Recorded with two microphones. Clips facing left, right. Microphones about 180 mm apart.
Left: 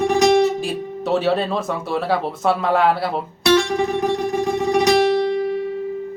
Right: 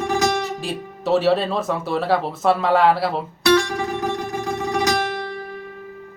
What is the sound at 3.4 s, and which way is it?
Guitar, 25° left (ahead or behind).